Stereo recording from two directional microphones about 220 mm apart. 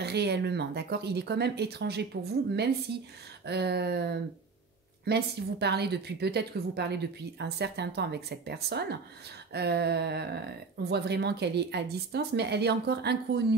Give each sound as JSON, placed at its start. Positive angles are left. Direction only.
{"t": 0.0, "sound": "speech", "side_deg": -50}